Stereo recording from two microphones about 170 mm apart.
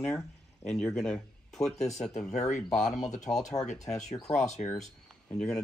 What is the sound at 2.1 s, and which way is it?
Speech, 45° left (ahead or behind).